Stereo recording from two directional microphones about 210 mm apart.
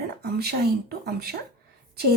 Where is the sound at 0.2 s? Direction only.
50° right (ahead or behind).